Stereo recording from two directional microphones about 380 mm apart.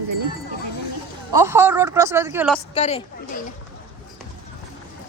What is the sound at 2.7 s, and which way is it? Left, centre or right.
Speech, centre.